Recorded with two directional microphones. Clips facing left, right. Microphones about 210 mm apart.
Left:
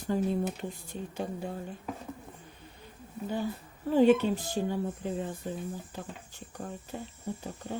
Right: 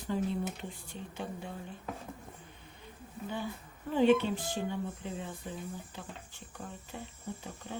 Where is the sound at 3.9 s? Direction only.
40° left (ahead or behind).